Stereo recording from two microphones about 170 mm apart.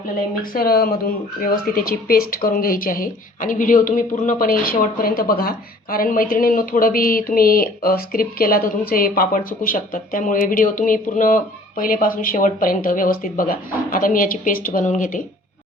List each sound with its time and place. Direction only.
0.5 s speech: 60° left (ahead or behind)